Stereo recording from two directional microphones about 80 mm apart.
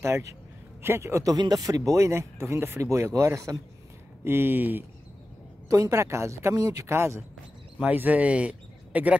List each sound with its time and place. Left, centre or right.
0.0 s speech: right
1.4 s speech: right
4.2 s speech: right
5.7 s speech: right
7.8 s speech: right